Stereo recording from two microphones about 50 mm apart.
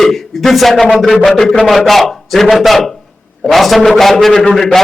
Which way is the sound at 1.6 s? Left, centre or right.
Centre.